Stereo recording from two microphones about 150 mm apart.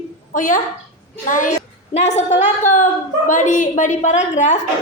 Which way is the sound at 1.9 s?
50° left (ahead or behind).